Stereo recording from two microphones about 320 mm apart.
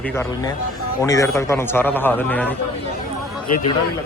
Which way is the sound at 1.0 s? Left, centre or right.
Centre.